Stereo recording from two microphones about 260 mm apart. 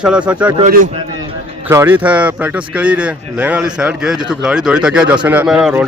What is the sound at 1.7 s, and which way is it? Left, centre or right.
A man's voice, centre.